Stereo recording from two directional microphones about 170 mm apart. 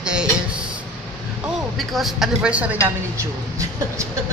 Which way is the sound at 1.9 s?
Centre (ahead or behind).